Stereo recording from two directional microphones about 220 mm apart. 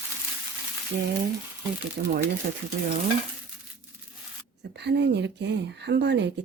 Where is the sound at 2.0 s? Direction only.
40° right (ahead or behind).